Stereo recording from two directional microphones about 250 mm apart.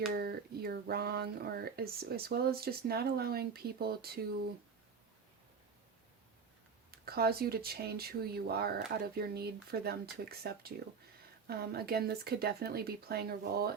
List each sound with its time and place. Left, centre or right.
0.1 s speech: right
6.9 s speech: right